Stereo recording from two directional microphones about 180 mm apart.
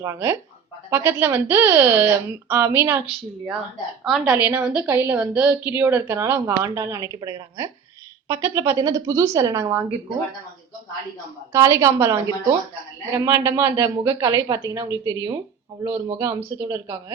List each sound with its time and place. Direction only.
0.0 s a woman's voice: 15° right (ahead or behind)
4.0 s a woman's voice: 5° right (ahead or behind)
11.5 s a woman's voice: 15° right (ahead or behind)
16.6 s a woman's voice: 15° right (ahead or behind)